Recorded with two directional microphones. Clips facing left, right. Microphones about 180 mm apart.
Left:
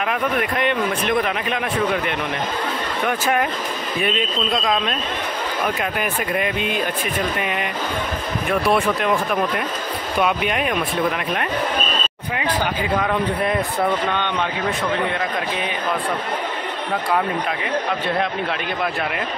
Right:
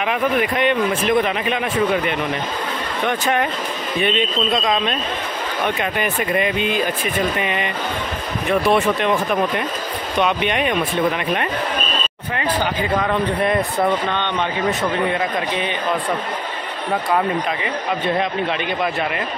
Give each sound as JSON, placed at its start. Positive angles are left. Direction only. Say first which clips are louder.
{"t": 0.0, "sound": "speech", "louder": "right 3 dB", "side_deg": -5}
{"t": 3.1, "sound": "speech", "louder": "right 1 dB", "side_deg": 0}
{"t": 13.0, "sound": "speech", "louder": "right 2 dB", "side_deg": 0}